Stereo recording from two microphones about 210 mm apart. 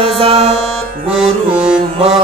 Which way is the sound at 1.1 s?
5° right (ahead or behind).